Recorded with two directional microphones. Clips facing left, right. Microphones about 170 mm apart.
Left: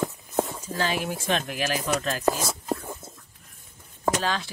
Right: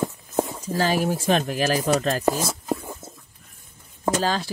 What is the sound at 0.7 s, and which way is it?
A man's voice, 40° right (ahead or behind).